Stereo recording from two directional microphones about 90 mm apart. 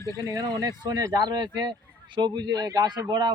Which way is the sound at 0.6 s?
45° right (ahead or behind).